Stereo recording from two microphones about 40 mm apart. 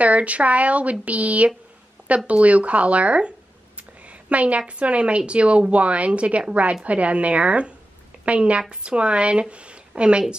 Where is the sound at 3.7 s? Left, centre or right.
Right.